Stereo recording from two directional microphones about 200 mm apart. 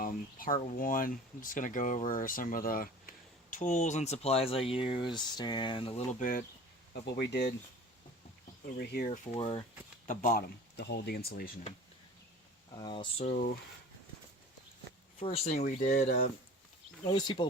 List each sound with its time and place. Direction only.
0.0 s speech: 45° left (ahead or behind); by 5.9 s 25° left (ahead or behind)
6.1 s speech: 40° left (ahead or behind)
7.0 s speech: 60° left (ahead or behind)
8.8 s speech: 55° left (ahead or behind)
9.0 s speech: 35° left (ahead or behind)
10.1 s speech: 40° left (ahead or behind)
12.7 s speech: 20° left (ahead or behind)
13.2 s speech: 45° left (ahead or behind)
15.2 s speech: 35° left (ahead or behind)
17.1 s speech: 20° left (ahead or behind)